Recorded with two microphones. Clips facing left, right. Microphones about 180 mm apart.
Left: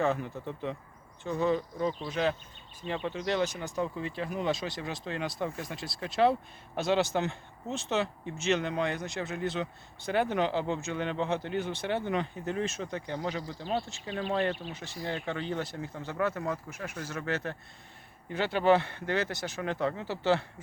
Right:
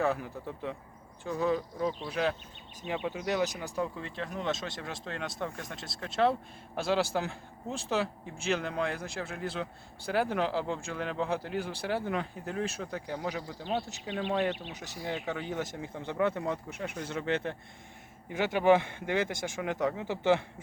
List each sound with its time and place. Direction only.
0.0 s speech: 5° right (ahead or behind)